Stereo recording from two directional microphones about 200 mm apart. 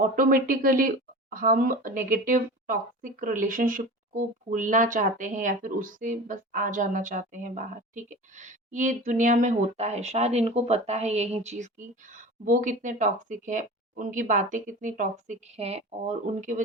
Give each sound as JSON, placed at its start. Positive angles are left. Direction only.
{"t": 0.2, "sound": "speech", "side_deg": -45}